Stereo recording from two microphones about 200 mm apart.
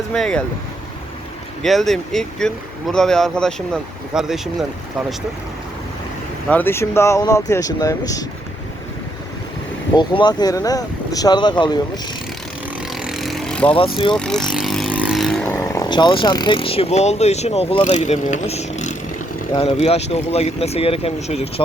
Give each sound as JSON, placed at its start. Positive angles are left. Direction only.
{"t": 0.1, "sound": "speech", "side_deg": 5}
{"t": 1.6, "sound": "speech", "side_deg": 0}
{"t": 6.5, "sound": "speech", "side_deg": 10}
{"t": 9.9, "sound": "speech", "side_deg": 20}
{"t": 12.9, "sound": "vehicle", "side_deg": 0}
{"t": 13.7, "sound": "speech", "side_deg": 25}
{"t": 14.1, "sound": "speech", "side_deg": 5}